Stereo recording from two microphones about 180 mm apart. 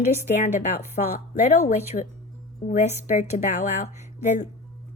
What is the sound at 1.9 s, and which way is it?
Speech, 50° left (ahead or behind).